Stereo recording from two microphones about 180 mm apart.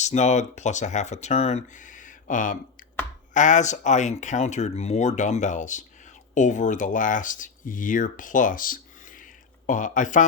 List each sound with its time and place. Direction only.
0.0 s speech: 40° left (ahead or behind)